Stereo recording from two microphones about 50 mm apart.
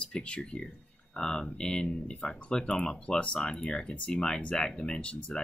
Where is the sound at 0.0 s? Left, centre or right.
Left.